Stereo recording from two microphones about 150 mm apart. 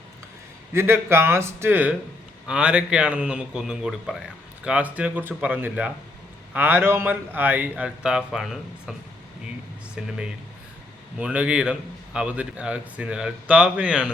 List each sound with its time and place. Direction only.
0.7 s a man's voice: 15° right (ahead or behind)